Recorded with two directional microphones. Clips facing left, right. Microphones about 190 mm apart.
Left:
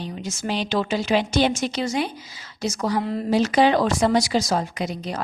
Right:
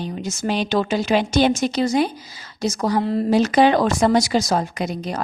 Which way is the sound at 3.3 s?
50° right (ahead or behind).